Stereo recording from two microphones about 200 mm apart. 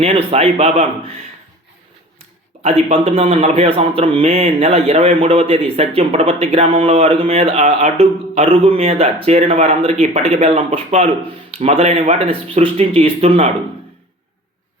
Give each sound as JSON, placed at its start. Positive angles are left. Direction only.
{"t": 0.0, "sound": "speech", "side_deg": -30}
{"t": 2.6, "sound": "speech", "side_deg": -30}